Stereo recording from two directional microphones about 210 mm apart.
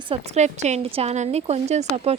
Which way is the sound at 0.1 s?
35° right (ahead or behind).